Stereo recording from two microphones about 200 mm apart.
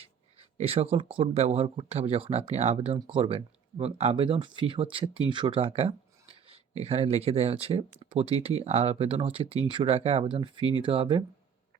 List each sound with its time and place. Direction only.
0.5 s speech: 30° right (ahead or behind)